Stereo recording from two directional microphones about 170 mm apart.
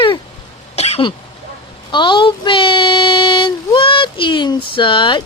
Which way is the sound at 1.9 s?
30° left (ahead or behind).